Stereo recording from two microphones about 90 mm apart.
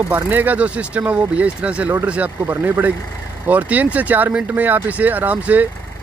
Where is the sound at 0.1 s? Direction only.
20° right (ahead or behind).